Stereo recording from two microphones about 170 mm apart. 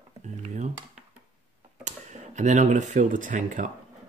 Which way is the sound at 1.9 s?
45° right (ahead or behind).